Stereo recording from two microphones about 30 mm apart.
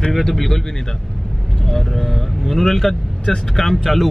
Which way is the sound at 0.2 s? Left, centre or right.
Centre.